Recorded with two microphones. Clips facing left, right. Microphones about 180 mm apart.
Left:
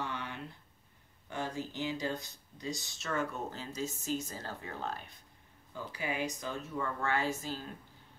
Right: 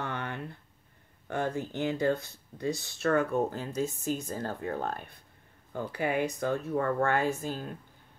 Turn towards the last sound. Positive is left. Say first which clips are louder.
# right 5 dB
turn(degrees=-55)  # may be behind; listen again after turning